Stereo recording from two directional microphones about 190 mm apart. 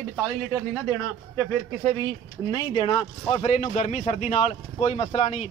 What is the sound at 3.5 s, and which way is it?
Speech, 40° left (ahead or behind).